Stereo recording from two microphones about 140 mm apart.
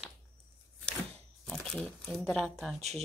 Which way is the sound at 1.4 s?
5° left (ahead or behind).